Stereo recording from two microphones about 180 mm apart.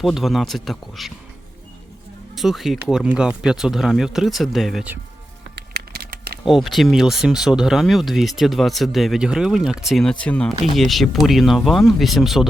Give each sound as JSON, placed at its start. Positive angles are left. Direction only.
{"t": 0.0, "sound": "speech", "side_deg": 0}
{"t": 2.3, "sound": "speech", "side_deg": 0}
{"t": 5.5, "sound": "a sound", "side_deg": -60}
{"t": 6.4, "sound": "speech", "side_deg": 0}